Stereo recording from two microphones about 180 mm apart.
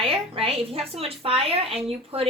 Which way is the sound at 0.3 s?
30° right (ahead or behind).